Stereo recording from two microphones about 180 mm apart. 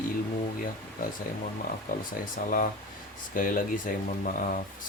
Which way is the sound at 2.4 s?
50° left (ahead or behind).